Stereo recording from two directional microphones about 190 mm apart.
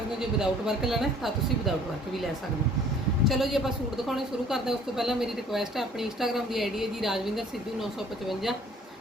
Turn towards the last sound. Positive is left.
turn(degrees=0)  # may be behind; listen again after turning